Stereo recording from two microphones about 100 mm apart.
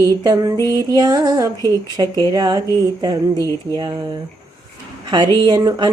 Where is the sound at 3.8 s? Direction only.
45° right (ahead or behind).